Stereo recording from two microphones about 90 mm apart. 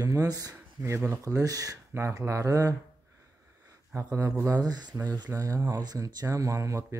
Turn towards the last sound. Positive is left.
turn(degrees=-35)  # may be behind; listen again after turning